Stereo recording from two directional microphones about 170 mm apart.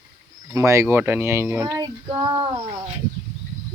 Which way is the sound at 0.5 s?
15° right (ahead or behind).